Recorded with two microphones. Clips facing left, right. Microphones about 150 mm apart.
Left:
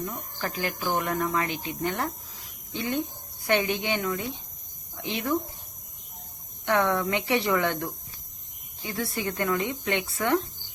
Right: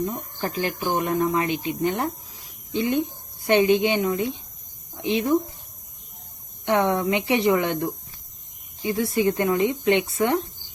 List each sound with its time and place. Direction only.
0.0 s speech: 25° right (ahead or behind)
6.7 s speech: 20° right (ahead or behind)